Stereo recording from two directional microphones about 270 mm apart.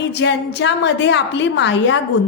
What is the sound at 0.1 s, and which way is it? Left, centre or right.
A woman's voice, left.